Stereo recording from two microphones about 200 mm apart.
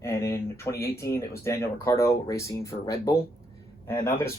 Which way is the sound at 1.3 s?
15° left (ahead or behind).